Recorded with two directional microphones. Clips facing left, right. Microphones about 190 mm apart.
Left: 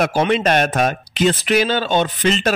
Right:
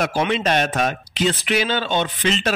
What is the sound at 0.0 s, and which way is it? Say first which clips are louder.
Speech: left 4 dB; 50° left (ahead or behind).